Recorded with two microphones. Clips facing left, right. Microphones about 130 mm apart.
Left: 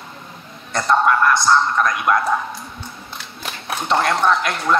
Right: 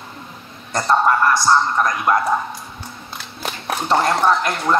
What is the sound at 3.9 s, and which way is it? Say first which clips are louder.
Speech: right 1 dB; 15° right (ahead or behind).